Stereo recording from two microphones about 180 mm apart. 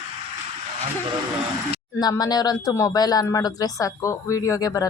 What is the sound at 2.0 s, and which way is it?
A woman's voice, 20° left (ahead or behind).